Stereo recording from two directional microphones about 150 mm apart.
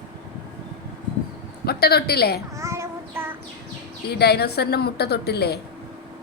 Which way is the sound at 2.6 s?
20° right (ahead or behind).